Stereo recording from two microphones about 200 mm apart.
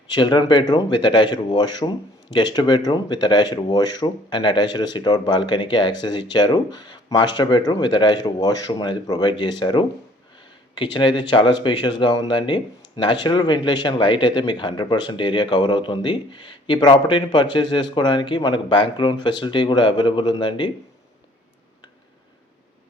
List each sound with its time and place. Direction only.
0.1 s speech: 25° left (ahead or behind)
10.9 s speech: 25° left (ahead or behind)